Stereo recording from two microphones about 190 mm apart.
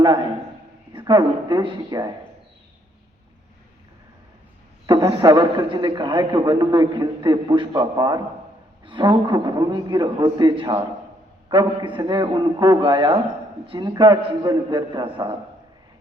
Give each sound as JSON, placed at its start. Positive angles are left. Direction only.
{"t": 0.9, "sound": "a man's voice", "side_deg": -20}
{"t": 4.9, "sound": "a man's voice", "side_deg": -20}